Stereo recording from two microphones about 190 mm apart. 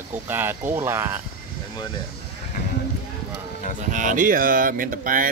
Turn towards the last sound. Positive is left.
turn(degrees=-45)  # may be behind; listen again after turning